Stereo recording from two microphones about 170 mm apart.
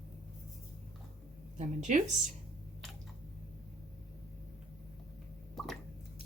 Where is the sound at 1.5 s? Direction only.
45° right (ahead or behind).